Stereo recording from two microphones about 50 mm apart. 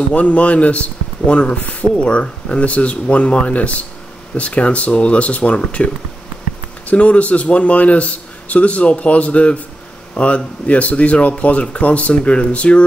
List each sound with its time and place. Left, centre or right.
0.1 s a man's voice: left
6.9 s a man's voice: left